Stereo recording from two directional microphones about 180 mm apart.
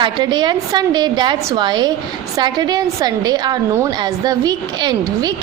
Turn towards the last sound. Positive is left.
turn(degrees=-20)  # may be behind; listen again after turning